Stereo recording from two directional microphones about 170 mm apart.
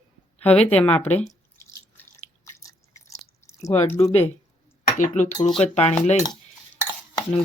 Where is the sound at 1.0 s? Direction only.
40° left (ahead or behind).